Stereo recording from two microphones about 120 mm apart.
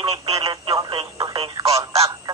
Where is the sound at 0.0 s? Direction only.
55° right (ahead or behind).